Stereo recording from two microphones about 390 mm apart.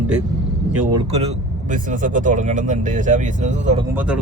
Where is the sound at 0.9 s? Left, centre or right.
Centre.